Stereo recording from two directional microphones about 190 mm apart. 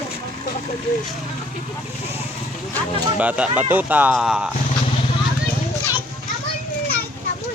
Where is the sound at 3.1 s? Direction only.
5° right (ahead or behind).